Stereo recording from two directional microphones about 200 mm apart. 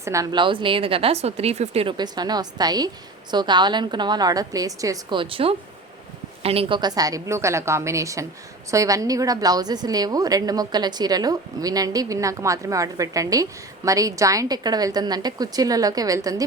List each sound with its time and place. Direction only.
0.0 s a woman's voice: 15° right (ahead or behind)